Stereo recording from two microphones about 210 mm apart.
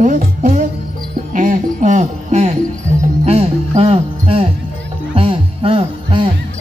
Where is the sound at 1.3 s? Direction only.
40° right (ahead or behind).